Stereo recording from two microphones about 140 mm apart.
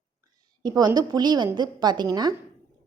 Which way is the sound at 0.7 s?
30° right (ahead or behind).